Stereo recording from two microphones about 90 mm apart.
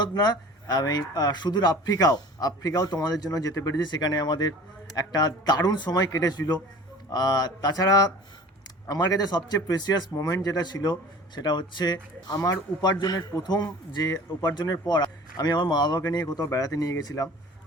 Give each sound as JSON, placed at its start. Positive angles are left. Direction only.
{"t": 0.0, "sound": "a man's voice", "side_deg": 50}
{"t": 3.8, "sound": "a man's voice", "side_deg": 50}